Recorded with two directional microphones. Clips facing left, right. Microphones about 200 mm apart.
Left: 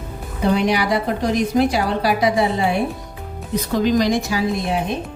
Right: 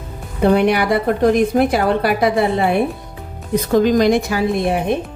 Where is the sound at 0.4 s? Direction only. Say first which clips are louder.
Right 4 dB; 55° right (ahead or behind).